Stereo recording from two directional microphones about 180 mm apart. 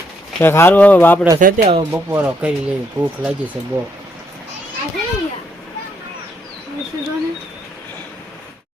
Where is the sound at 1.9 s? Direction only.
10° right (ahead or behind).